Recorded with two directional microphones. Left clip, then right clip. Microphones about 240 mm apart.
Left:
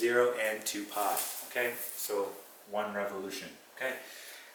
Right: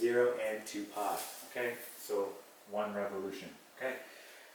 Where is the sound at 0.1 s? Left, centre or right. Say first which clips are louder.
Left 3 dB; centre.